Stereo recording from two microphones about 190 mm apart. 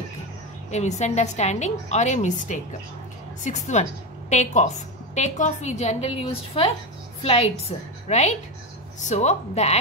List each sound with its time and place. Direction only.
0.7 s a woman's voice: 35° left (ahead or behind)